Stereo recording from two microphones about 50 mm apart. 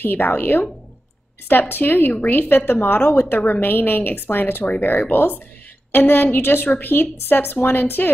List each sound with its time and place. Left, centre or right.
0.0 s a woman's voice: left